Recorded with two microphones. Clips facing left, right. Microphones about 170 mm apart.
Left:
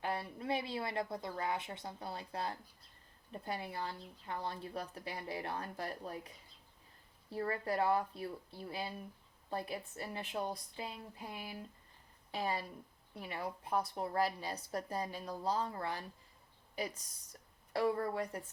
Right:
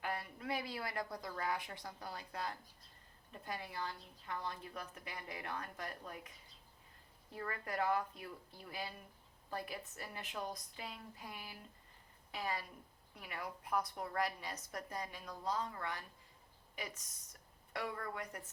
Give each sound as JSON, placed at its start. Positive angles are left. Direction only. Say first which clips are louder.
{"t": 0.0, "sound": "a woman's voice", "louder": "left 4 dB", "side_deg": 30}